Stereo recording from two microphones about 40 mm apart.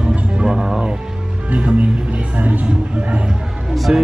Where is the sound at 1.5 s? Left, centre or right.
Right.